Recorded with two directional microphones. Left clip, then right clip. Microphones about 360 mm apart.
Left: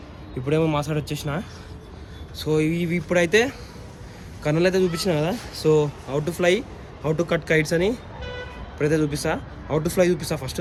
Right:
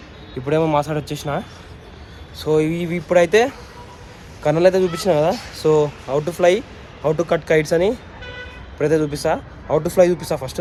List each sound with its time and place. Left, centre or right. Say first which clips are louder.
0.4 s speech: right 5 dB; centre
8.2 s vehicle: right 1 dB; left
8.8 s speech: right 4 dB; centre